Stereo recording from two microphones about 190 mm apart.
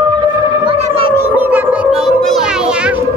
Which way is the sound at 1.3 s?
10° right (ahead or behind).